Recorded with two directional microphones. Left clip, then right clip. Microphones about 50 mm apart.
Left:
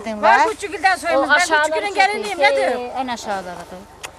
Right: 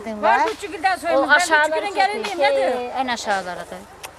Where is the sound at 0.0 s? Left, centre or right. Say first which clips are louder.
Left 4 dB; left.